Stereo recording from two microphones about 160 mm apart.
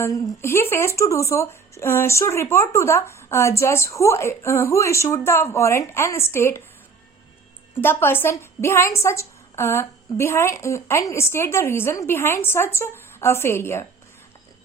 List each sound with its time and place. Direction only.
0.0 s speech: 15° left (ahead or behind)
7.8 s speech: 15° left (ahead or behind)